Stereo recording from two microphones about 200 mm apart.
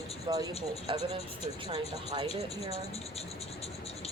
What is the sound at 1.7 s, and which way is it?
Speech, 25° right (ahead or behind).